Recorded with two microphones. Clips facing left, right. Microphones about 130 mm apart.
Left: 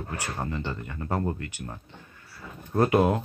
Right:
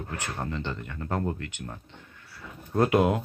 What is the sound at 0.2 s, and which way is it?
Speech, 10° left (ahead or behind).